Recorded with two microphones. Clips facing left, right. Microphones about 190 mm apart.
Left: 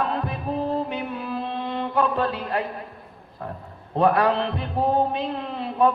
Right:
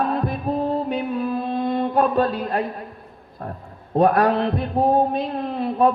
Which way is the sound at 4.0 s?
40° right (ahead or behind).